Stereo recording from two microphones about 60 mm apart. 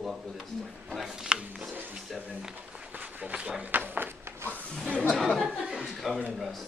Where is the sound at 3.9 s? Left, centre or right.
Right.